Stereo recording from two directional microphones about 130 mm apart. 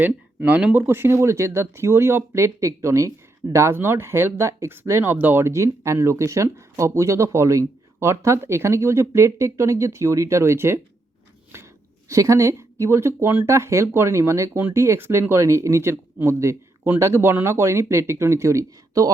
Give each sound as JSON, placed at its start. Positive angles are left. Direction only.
{"t": 0.0, "sound": "speech", "side_deg": -15}